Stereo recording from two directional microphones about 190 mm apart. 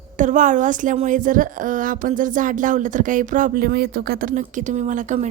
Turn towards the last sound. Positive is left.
turn(degrees=-40)  # may be behind; listen again after turning